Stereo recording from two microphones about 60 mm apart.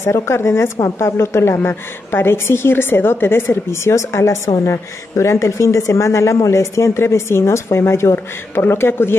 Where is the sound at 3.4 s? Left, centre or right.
Left.